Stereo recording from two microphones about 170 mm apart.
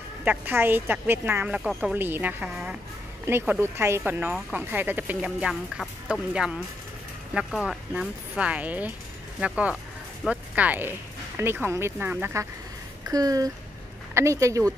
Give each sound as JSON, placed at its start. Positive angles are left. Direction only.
{"t": 0.2, "sound": "speech", "side_deg": -10}